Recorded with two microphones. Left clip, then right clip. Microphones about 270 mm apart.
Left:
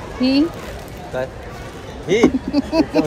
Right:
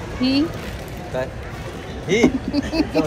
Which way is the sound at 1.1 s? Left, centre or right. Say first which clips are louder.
Left 1 dB; left.